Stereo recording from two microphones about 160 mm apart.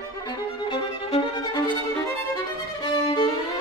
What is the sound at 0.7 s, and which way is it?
Violin, 35° left (ahead or behind).